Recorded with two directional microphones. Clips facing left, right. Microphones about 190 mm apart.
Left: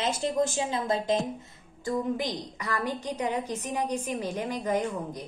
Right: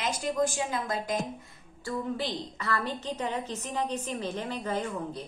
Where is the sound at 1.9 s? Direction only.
15° left (ahead or behind).